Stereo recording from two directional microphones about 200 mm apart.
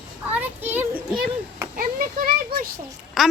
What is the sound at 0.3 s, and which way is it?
Children playing, 10° right (ahead or behind).